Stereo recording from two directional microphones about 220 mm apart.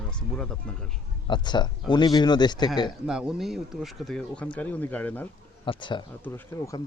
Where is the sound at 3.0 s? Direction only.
5° right (ahead or behind).